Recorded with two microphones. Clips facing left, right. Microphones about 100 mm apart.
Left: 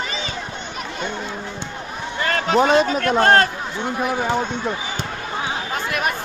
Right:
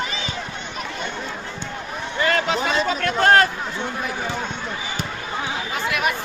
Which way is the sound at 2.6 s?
50° left (ahead or behind).